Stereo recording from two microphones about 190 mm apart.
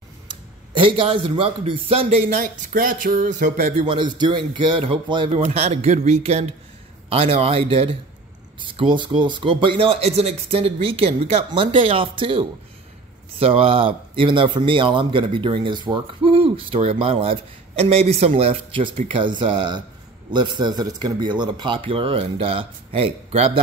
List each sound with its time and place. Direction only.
0.9 s speech: 25° right (ahead or behind)
3.7 s speech: 25° right (ahead or behind)
5.4 s speech: 35° right (ahead or behind)